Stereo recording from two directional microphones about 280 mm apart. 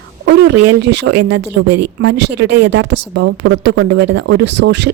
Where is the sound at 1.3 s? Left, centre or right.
Right.